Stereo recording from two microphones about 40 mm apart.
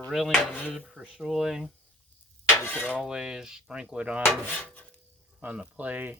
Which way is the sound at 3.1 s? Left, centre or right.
Centre.